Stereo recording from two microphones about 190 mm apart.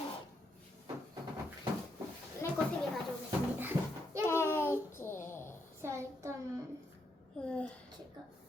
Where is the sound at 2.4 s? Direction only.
15° left (ahead or behind).